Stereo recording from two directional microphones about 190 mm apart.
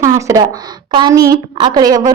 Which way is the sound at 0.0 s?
15° right (ahead or behind).